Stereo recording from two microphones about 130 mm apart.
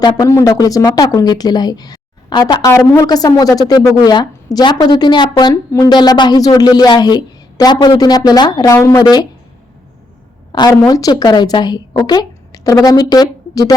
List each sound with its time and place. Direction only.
0.0 s speech: 25° left (ahead or behind)
10.6 s a woman's voice: 25° left (ahead or behind)